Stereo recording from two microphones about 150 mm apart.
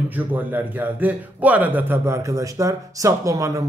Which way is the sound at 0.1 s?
10° right (ahead or behind).